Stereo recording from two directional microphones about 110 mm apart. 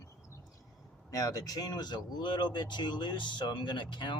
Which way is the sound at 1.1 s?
35° left (ahead or behind).